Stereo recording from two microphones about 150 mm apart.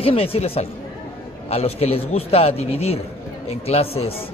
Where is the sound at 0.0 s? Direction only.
40° left (ahead or behind).